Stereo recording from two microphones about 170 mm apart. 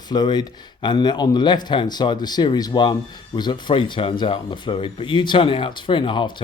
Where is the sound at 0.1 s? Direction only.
25° left (ahead or behind).